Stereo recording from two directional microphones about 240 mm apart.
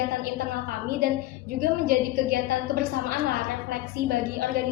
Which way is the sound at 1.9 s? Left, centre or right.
Right.